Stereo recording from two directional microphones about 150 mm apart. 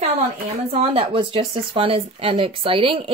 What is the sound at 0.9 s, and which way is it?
Speech, 35° right (ahead or behind).